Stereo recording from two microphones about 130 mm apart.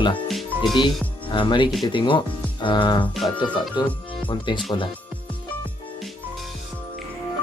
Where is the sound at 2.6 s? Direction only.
40° left (ahead or behind).